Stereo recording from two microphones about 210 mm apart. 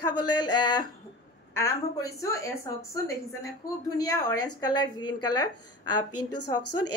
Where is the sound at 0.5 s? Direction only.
20° left (ahead or behind).